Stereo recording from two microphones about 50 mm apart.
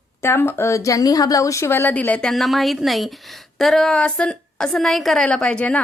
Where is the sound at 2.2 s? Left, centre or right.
Centre.